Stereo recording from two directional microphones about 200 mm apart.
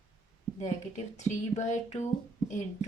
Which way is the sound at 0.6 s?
35° left (ahead or behind).